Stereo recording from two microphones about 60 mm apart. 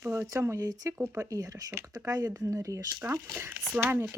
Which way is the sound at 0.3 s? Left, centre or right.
Right.